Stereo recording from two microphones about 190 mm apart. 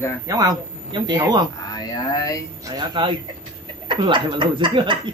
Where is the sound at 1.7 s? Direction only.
20° left (ahead or behind).